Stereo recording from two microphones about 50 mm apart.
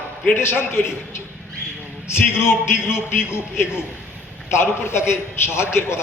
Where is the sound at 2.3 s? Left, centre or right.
Left.